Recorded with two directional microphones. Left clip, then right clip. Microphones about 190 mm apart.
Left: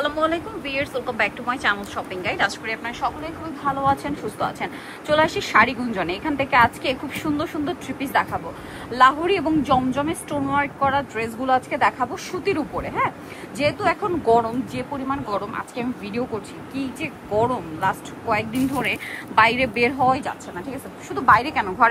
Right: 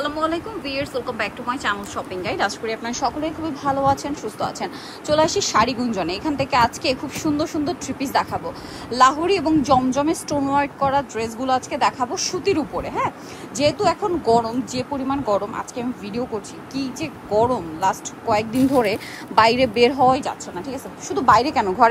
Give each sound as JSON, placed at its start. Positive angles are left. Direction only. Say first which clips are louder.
{"t": 0.0, "sound": "a woman's voice", "louder": "left 1 dB", "side_deg": -15}